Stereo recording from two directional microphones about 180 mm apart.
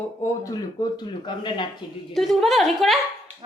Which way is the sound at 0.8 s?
25° left (ahead or behind).